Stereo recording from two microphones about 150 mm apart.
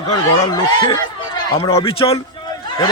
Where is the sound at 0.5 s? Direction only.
25° left (ahead or behind).